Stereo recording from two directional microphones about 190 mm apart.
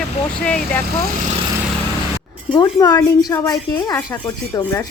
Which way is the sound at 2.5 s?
20° left (ahead or behind).